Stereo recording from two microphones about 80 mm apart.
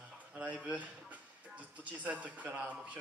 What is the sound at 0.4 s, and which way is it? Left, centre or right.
Speech, centre.